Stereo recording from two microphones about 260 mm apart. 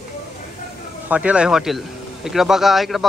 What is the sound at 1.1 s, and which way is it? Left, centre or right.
A man's voice, centre.